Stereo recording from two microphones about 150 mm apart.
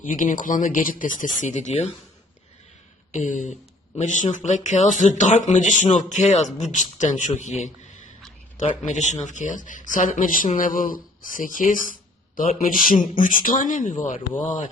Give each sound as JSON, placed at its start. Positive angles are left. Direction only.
{"t": 0.0, "sound": "speech", "side_deg": 55}
{"t": 3.1, "sound": "speech", "side_deg": 55}
{"t": 8.8, "sound": "speech", "side_deg": 55}